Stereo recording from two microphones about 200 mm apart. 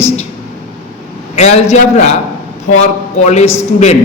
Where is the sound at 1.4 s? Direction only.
35° left (ahead or behind).